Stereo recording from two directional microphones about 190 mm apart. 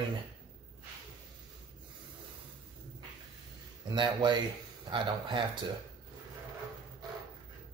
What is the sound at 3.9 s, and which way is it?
Speech, 25° right (ahead or behind).